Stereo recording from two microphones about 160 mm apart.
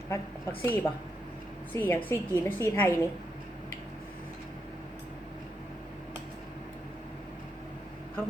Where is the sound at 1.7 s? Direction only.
15° left (ahead or behind).